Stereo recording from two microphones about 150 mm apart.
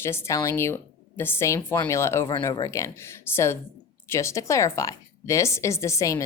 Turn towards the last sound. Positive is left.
turn(degrees=20)  # may be behind; listen again after turning